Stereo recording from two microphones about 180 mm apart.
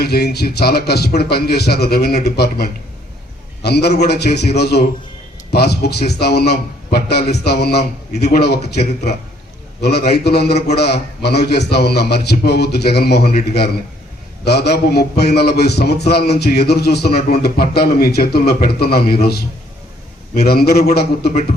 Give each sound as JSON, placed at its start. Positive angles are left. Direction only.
{"t": 0.0, "sound": "a man's voice", "side_deg": 65}